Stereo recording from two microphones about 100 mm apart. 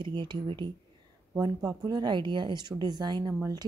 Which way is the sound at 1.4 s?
40° right (ahead or behind).